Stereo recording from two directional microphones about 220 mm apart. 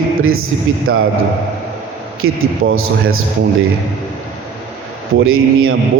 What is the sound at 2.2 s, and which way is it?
A man's voice, 70° right (ahead or behind).